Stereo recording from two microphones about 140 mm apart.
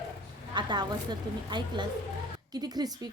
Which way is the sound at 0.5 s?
30° right (ahead or behind).